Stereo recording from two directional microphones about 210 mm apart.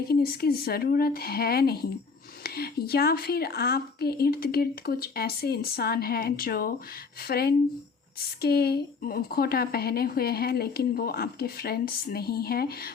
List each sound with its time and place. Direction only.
0.1 s a woman's voice: 45° left (ahead or behind)